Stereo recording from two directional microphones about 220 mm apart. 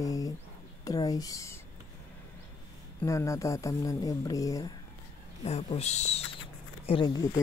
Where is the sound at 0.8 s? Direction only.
15° left (ahead or behind).